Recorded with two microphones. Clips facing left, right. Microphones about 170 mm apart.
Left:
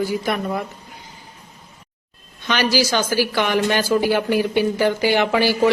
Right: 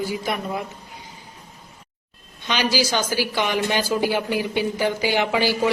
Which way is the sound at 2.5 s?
15° right (ahead or behind).